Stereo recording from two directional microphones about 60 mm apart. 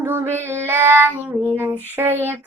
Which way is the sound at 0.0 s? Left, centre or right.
Right.